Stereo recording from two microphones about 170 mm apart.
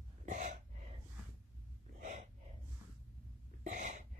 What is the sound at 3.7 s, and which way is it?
Cough, 45° right (ahead or behind).